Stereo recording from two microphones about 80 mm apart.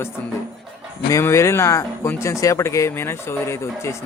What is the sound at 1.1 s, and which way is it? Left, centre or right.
Speech, left.